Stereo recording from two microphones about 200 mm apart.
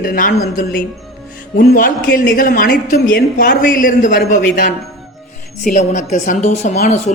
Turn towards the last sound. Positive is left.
turn(degrees=35)  # may be behind; listen again after turning